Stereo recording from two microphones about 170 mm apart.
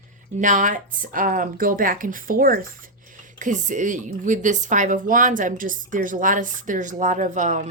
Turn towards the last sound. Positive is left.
turn(degrees=-50)  # may be behind; listen again after turning